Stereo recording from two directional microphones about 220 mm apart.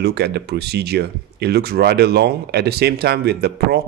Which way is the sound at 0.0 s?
50° right (ahead or behind).